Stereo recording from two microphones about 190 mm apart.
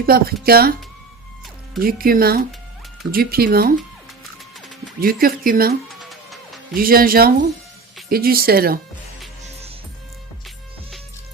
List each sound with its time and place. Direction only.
0.0 s speech: 50° right (ahead or behind)
1.8 s speech: 50° right (ahead or behind)
4.9 s speech: 50° right (ahead or behind)
5.9 s music: centre (ahead or behind)
6.7 s speech: 50° right (ahead or behind)